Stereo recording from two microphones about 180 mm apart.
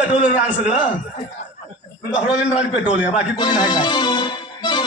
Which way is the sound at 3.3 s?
25° left (ahead or behind).